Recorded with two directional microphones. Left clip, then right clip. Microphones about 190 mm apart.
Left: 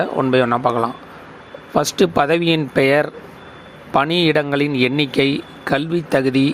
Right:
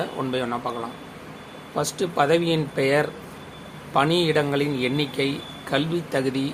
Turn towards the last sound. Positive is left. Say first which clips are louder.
# left 8 dB
turn(degrees=40)  # may be behind; listen again after turning